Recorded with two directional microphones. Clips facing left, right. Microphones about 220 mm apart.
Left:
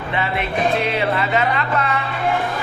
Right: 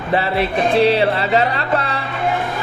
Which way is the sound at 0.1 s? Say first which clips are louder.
Right 5 dB; 35° right (ahead or behind).